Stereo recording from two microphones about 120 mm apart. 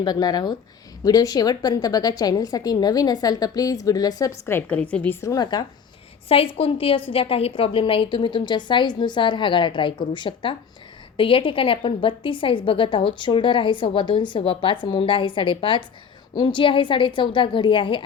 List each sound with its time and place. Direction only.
0.0 s a woman's voice: 35° left (ahead or behind)
4.7 s a woman's voice: 10° left (ahead or behind)
5.2 s a woman's voice: 30° left (ahead or behind)
6.2 s a woman's voice: 50° left (ahead or behind)